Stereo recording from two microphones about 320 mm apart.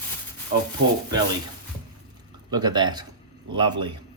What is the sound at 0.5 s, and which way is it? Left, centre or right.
Speech, right.